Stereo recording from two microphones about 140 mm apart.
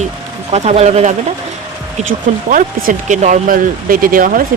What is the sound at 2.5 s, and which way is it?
Speech, 70° right (ahead or behind).